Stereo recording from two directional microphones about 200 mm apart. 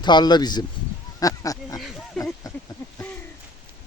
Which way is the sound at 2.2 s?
Centre (ahead or behind).